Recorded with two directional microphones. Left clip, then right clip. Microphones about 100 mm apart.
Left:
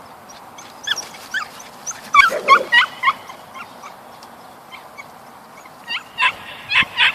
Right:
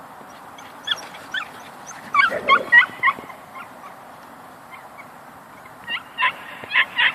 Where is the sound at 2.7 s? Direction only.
35° left (ahead or behind).